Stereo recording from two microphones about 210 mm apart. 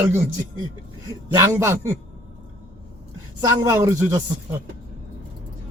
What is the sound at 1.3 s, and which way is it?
Speech, 15° right (ahead or behind).